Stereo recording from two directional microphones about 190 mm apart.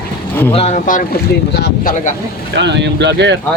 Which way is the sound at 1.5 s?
60° left (ahead or behind).